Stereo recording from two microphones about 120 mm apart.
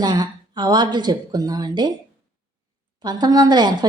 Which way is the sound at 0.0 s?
35° right (ahead or behind).